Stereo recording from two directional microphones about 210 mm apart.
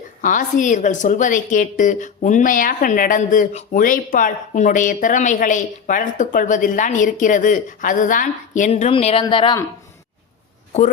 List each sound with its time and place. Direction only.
0.2 s a woman's voice: 40° left (ahead or behind); by 9.6 s 20° left (ahead or behind)